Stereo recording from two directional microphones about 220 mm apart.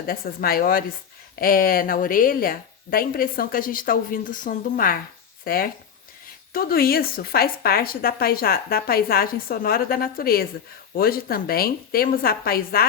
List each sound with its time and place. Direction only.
0.1 s speech: 40° left (ahead or behind)